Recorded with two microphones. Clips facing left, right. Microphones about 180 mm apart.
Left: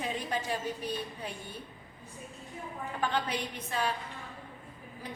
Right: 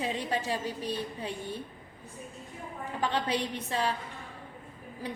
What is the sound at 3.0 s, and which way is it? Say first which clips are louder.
Speech: right 3 dB; 30° right (ahead or behind).